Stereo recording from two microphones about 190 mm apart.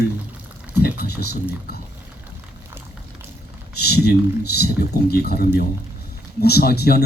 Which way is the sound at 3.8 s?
55° left (ahead or behind).